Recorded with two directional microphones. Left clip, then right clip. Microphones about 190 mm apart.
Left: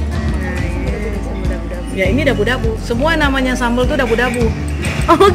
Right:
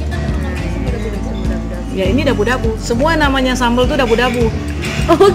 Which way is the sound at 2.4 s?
25° right (ahead or behind).